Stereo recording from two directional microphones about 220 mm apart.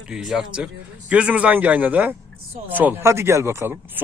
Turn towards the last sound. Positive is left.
turn(degrees=-10)  # may be behind; listen again after turning